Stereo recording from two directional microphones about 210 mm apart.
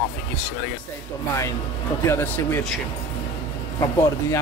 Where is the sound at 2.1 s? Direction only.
10° left (ahead or behind).